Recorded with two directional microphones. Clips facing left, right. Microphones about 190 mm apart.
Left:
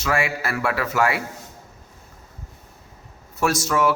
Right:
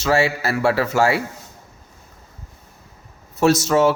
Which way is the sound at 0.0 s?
25° right (ahead or behind).